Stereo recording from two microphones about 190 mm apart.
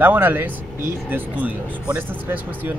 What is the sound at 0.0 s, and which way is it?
Speech, 10° right (ahead or behind).